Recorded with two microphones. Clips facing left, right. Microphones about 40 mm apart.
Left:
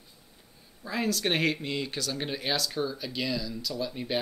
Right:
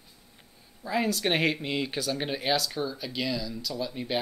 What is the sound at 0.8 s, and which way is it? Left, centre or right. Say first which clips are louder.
Speech: right 2 dB; centre.